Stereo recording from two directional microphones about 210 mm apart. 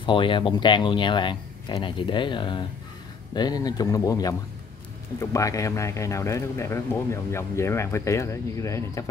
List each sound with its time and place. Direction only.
0.0 s a man's voice: 25° left (ahead or behind)